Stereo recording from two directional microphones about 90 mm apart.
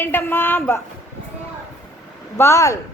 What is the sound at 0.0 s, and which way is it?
Speech, 25° left (ahead or behind).